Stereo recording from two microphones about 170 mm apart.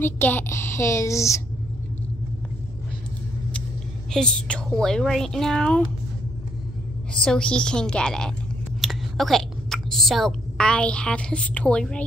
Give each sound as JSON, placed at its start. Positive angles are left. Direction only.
{"t": 0.0, "sound": "a woman's voice", "side_deg": 10}
{"t": 4.1, "sound": "a woman's voice", "side_deg": 5}
{"t": 7.2, "sound": "a woman's voice", "side_deg": 5}